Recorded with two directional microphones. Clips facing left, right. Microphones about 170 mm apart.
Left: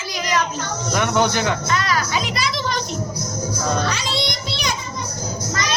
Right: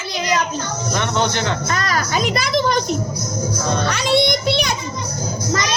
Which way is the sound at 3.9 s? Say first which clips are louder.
Right 8 dB; 55° right (ahead or behind).